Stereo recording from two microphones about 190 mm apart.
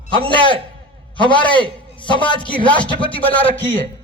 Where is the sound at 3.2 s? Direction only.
10° left (ahead or behind).